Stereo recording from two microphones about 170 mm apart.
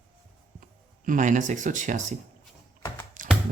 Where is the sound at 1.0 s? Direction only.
50° right (ahead or behind).